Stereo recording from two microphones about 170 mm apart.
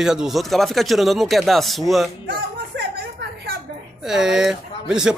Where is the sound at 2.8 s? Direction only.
70° right (ahead or behind).